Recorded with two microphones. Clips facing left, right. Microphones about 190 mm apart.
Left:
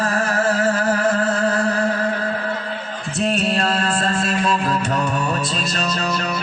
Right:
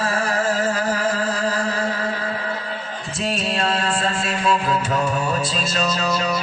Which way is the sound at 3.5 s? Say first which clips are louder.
Left 2 dB; 40° left (ahead or behind).